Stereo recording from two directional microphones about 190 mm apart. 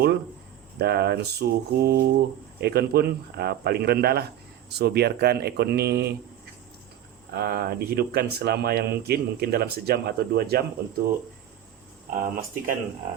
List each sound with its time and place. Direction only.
0.8 s speech: 60° right (ahead or behind)
7.3 s speech: 55° right (ahead or behind)
12.1 s speech: 45° right (ahead or behind)